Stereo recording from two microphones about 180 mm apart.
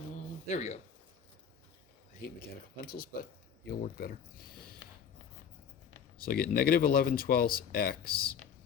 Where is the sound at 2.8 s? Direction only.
55° left (ahead or behind).